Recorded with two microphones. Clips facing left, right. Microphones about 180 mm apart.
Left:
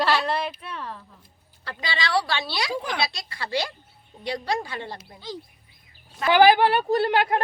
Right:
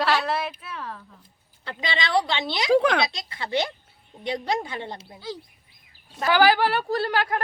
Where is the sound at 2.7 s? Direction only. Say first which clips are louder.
Right 14 dB; 75° right (ahead or behind).